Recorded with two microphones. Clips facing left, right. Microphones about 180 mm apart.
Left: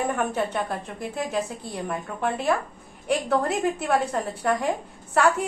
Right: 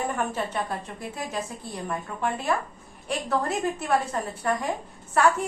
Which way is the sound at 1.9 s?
55° left (ahead or behind).